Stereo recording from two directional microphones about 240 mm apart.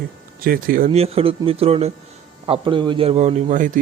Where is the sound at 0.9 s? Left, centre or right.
Right.